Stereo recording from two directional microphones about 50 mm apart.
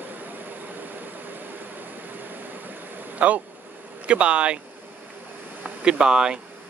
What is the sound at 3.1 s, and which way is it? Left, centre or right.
Speech, right.